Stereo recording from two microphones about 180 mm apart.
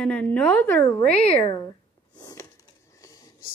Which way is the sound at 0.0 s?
5° left (ahead or behind).